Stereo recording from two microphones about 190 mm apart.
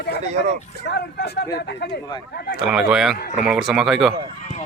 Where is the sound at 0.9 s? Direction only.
60° left (ahead or behind).